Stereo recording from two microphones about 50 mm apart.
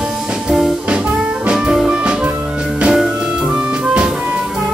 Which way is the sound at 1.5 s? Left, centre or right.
Centre.